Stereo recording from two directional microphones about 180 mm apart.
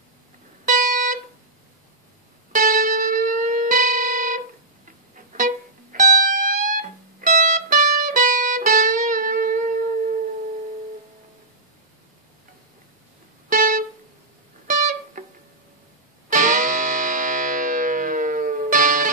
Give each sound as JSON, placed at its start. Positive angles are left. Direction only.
{"t": 0.7, "sound": "music", "side_deg": -45}
{"t": 2.5, "sound": "music", "side_deg": -50}
{"t": 13.5, "sound": "music", "side_deg": -45}
{"t": 16.3, "sound": "music", "side_deg": -45}